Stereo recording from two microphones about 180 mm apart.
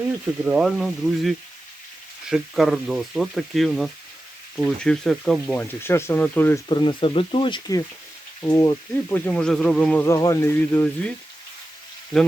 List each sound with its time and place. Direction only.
0.4 s speech: 5° right (ahead or behind); by 6.6 s 10° left (ahead or behind)
6.7 s speech: 25° left (ahead or behind)